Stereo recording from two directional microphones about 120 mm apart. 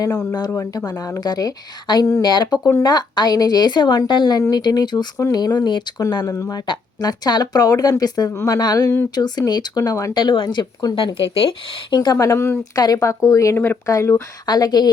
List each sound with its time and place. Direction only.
0.3 s a woman's voice: 30° left (ahead or behind)
2.6 s speech: 25° left (ahead or behind)
2.9 s a woman's voice: 35° left (ahead or behind)
10.9 s speech: 50° left (ahead or behind)
12.1 s speech: 25° left (ahead or behind)
14.4 s a woman's voice: 35° left (ahead or behind)